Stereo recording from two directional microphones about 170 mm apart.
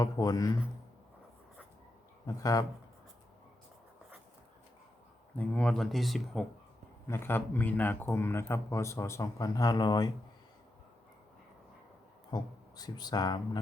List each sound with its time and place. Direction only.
0.0 s speech: 20° left (ahead or behind)
2.2 s speech: 20° left (ahead or behind)
5.4 s speech: 5° left (ahead or behind)
7.1 s a man's voice: 15° left (ahead or behind)
12.3 s speech: 25° left (ahead or behind)